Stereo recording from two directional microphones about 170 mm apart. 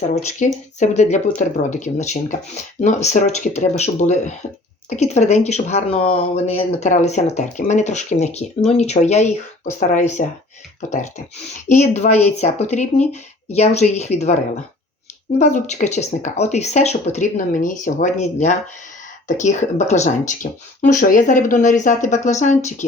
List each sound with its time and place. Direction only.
0.1 s speech: 45° left (ahead or behind)
11.8 s speech: 45° left (ahead or behind)